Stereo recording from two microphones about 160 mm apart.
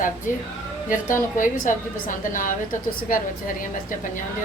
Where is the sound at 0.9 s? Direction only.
55° left (ahead or behind).